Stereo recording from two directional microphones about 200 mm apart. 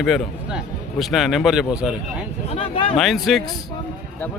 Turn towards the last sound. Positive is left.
turn(degrees=0)  # may be behind; listen again after turning